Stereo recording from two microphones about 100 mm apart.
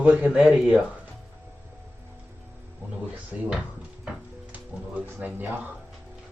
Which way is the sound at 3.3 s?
10° right (ahead or behind).